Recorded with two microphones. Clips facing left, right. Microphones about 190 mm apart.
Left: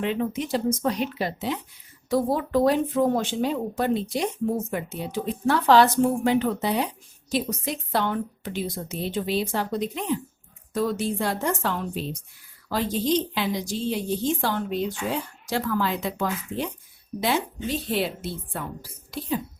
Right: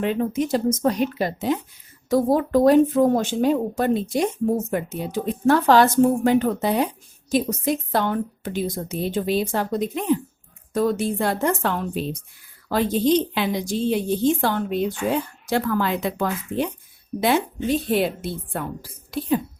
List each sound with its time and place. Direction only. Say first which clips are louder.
0.0 s a woman's voice: right 4 dB; 45° right (ahead or behind)